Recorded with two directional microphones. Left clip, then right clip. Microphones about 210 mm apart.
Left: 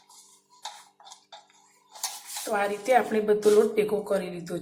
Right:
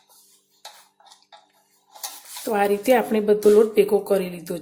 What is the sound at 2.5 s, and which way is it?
A woman's voice, 45° right (ahead or behind).